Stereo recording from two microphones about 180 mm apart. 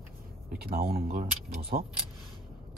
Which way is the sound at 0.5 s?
55° right (ahead or behind).